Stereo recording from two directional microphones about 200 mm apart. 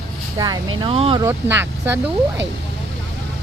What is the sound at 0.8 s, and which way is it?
Speech, 25° right (ahead or behind).